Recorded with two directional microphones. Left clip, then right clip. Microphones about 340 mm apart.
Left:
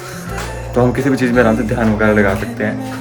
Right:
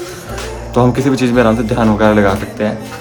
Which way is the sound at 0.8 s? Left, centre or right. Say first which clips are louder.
Right 2 dB; centre.